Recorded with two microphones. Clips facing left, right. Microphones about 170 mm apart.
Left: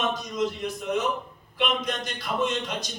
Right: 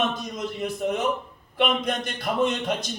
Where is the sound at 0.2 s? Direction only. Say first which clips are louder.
Left 2 dB; 50° right (ahead or behind).